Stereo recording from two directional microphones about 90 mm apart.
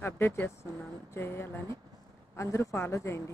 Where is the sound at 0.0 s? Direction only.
25° left (ahead or behind).